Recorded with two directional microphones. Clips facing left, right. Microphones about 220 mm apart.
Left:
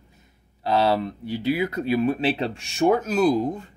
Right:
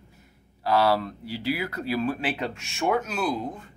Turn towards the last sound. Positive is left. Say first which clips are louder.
# left 8 dB
turn(degrees=40)  # may be behind; listen again after turning